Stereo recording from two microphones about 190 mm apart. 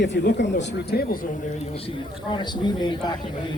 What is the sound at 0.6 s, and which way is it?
Speech, 55° left (ahead or behind).